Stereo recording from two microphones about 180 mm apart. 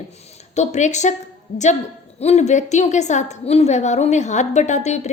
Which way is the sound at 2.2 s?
35° left (ahead or behind).